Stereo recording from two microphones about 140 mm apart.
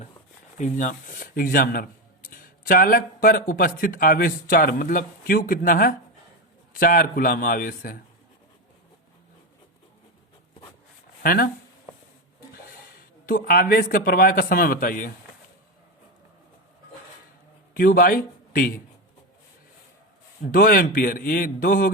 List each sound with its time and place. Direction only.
0.6 s speech: 65° left (ahead or behind); by 7.9 s 90° left
11.2 s speech: 90° left
13.0 s speech: 90° left
17.7 s speech: 90° left
20.4 s speech: 85° left